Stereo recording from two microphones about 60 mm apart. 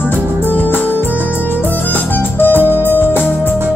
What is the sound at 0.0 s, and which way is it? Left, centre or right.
Music, left.